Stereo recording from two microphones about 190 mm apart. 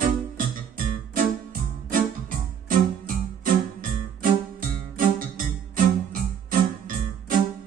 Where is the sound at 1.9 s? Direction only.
45° right (ahead or behind).